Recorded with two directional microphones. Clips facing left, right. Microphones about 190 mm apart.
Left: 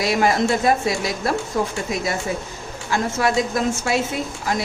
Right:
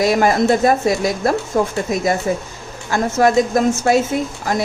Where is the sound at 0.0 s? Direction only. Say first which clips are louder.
Right 4 dB; 45° right (ahead or behind).